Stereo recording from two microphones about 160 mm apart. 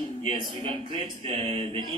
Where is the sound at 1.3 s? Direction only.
35° right (ahead or behind).